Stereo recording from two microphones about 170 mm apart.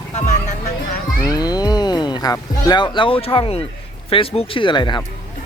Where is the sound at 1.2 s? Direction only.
25° left (ahead or behind).